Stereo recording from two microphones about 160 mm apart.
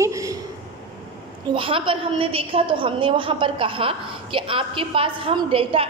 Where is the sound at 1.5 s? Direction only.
35° right (ahead or behind).